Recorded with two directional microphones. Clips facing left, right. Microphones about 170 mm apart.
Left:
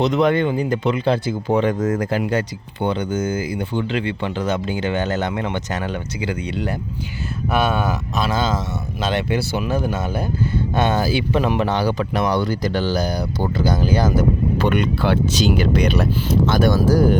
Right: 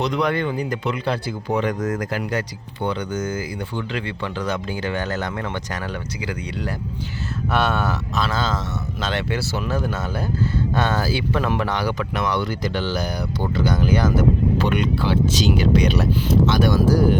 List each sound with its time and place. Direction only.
0.0 s speech: 25° left (ahead or behind)
7.5 s speech: 10° left (ahead or behind); by 14.3 s 35° left (ahead or behind)
14.6 s speech: 55° left (ahead or behind)